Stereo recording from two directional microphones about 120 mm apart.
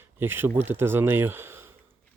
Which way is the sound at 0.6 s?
20° right (ahead or behind).